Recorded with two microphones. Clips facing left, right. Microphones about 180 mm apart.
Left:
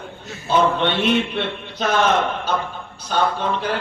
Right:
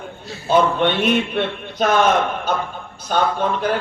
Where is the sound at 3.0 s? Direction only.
50° right (ahead or behind).